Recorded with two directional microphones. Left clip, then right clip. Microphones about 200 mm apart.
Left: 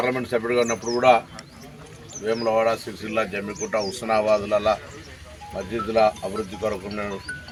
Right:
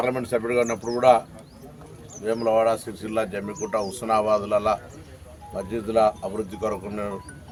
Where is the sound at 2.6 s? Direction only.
25° right (ahead or behind).